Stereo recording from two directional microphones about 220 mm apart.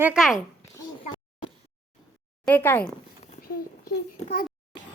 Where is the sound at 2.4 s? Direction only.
10° left (ahead or behind).